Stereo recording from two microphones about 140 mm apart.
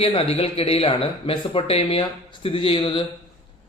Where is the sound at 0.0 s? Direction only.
45° left (ahead or behind).